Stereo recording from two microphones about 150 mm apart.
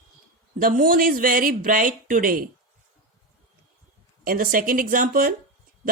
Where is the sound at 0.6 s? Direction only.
70° right (ahead or behind).